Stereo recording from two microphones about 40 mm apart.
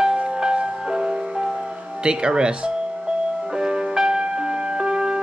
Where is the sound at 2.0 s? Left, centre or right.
Right.